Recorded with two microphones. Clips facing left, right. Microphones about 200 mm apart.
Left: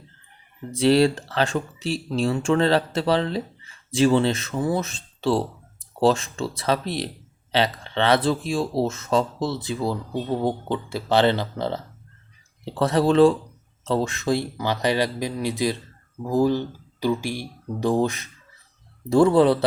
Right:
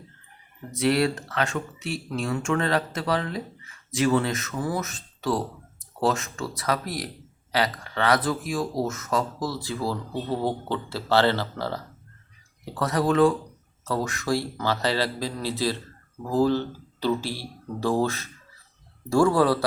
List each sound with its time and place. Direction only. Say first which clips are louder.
0.7 s speech: left 5 dB; 30° left (ahead or behind)